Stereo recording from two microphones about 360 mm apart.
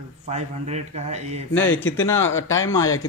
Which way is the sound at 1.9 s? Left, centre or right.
Centre.